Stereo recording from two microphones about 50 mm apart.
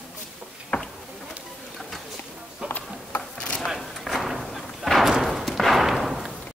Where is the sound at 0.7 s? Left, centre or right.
Left.